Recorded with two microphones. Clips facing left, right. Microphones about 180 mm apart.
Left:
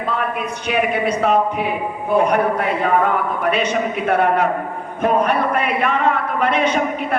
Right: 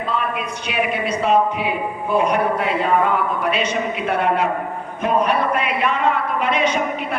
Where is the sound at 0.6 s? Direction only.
55° left (ahead or behind).